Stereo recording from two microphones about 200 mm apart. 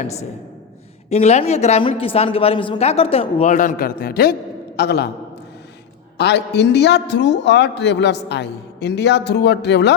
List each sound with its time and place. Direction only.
1.1 s a man's voice: 35° left (ahead or behind); by 5.0 s 55° left (ahead or behind)
6.1 s a man's voice: 55° left (ahead or behind)